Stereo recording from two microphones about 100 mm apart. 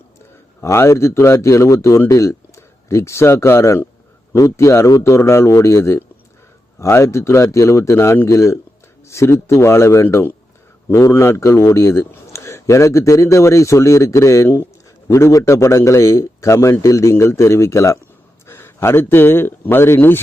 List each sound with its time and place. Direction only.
0.6 s a man's voice: 25° left (ahead or behind)